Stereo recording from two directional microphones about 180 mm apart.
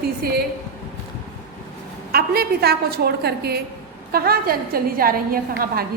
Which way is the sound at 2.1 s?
60° right (ahead or behind).